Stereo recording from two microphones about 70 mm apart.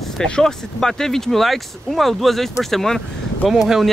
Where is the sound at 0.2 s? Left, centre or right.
Centre.